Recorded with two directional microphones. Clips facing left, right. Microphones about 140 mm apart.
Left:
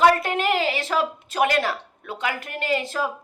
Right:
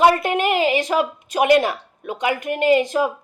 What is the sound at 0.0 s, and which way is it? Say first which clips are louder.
A woman's voice: right 2 dB; 15° right (ahead or behind).